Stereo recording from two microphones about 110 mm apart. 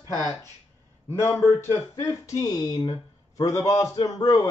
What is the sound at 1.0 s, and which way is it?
Speech, 20° left (ahead or behind).